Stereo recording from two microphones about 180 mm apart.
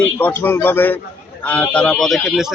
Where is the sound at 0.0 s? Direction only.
10° left (ahead or behind).